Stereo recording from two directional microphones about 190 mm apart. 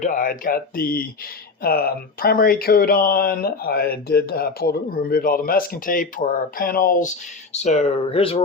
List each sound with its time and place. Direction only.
0.0 s speech: 45° left (ahead or behind)
7.5 s speech: 35° left (ahead or behind)